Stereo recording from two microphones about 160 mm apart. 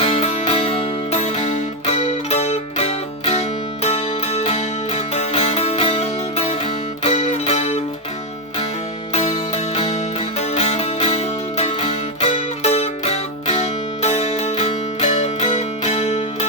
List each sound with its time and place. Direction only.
0.0 s music: 40° left (ahead or behind)
9.1 s music: 45° left (ahead or behind)